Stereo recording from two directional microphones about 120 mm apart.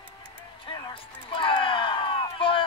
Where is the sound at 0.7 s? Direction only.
45° left (ahead or behind).